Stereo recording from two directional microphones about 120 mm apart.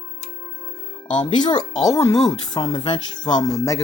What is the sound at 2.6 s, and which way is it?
Speech, 40° left (ahead or behind).